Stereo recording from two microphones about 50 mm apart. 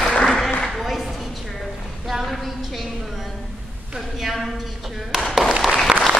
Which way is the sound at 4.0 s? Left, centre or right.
Centre.